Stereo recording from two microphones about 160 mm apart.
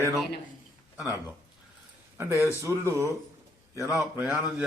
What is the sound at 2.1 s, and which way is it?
Speech, 15° right (ahead or behind).